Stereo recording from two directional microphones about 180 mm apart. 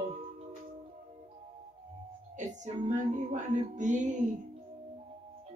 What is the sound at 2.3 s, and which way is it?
Music, 45° right (ahead or behind).